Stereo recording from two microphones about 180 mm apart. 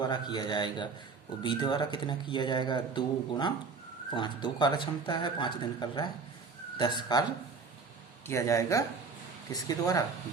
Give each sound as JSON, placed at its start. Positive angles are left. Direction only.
{"t": 0.0, "sound": "speech", "side_deg": 25}
{"t": 8.3, "sound": "speech", "side_deg": 15}